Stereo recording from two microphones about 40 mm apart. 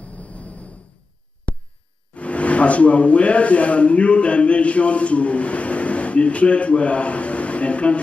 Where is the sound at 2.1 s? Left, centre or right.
Left.